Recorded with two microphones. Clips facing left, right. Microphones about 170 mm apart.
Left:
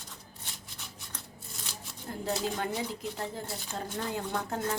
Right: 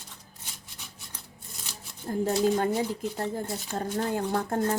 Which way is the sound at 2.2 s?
45° right (ahead or behind).